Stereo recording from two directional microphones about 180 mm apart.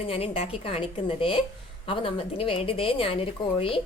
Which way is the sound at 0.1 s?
30° left (ahead or behind).